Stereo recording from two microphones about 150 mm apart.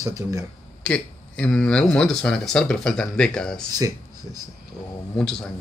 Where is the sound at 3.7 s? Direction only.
25° right (ahead or behind).